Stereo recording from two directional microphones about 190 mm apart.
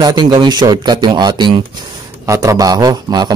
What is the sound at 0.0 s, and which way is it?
Speech, 20° right (ahead or behind).